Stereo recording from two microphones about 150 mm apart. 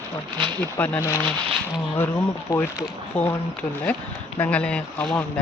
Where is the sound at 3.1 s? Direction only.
10° left (ahead or behind).